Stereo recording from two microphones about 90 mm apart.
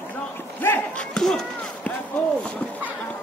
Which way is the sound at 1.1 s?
5° left (ahead or behind).